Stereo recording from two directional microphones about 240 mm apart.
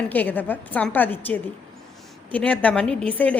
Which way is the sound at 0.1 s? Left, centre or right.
Centre.